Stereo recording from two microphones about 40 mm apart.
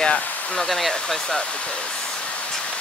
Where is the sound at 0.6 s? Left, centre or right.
Centre.